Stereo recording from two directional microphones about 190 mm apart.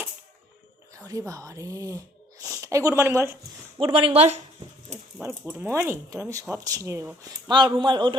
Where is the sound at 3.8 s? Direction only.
30° right (ahead or behind).